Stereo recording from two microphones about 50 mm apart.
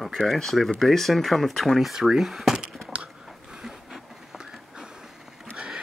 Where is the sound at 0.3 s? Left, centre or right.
Centre.